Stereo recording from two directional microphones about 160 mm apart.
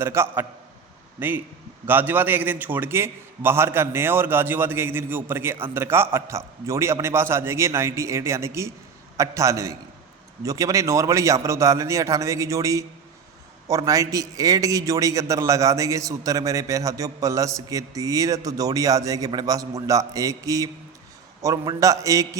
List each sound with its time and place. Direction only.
0.0 s a man's voice: 15° right (ahead or behind)